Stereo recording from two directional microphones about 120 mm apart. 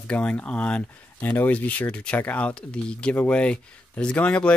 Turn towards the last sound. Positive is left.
turn(degrees=10)  # may be behind; listen again after turning